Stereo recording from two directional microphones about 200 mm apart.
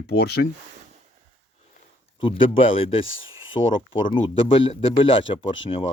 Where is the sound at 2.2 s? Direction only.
25° left (ahead or behind).